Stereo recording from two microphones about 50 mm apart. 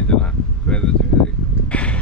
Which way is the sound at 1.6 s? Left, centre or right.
Left.